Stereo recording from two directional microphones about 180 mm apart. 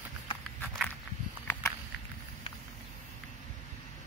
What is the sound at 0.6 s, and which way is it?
Walk, 10° left (ahead or behind).